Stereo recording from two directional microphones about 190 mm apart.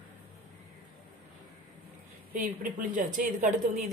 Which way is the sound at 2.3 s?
45° right (ahead or behind).